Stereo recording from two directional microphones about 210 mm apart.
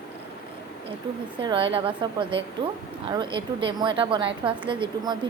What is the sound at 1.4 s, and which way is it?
A woman's voice, 25° right (ahead or behind).